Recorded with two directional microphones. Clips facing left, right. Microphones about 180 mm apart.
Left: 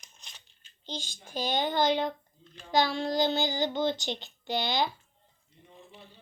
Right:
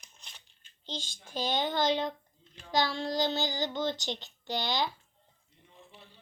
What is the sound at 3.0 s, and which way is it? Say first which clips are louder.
Child singing: left 3 dB; 50° left (ahead or behind).